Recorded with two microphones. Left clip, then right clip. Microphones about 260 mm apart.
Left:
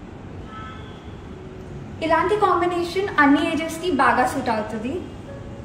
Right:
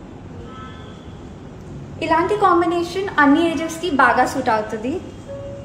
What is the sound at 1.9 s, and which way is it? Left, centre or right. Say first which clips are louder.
A woman's voice: right 1 dB; right.